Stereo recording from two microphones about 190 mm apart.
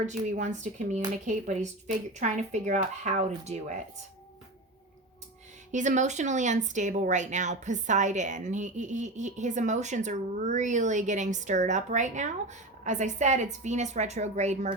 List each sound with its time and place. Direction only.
0.0 s speech: 40° right (ahead or behind)
5.7 s speech: 40° right (ahead or behind)